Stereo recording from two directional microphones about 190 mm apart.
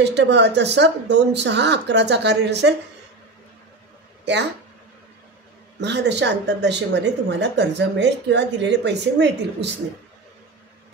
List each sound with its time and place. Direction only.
0.0 s speech: 65° right (ahead or behind)
5.8 s speech: 65° right (ahead or behind)